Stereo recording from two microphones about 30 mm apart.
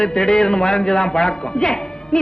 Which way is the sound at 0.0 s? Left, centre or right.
Left.